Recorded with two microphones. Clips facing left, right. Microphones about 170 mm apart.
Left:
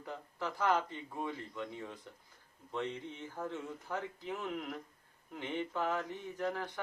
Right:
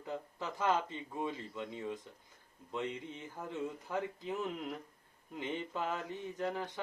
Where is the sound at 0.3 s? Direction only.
20° right (ahead or behind).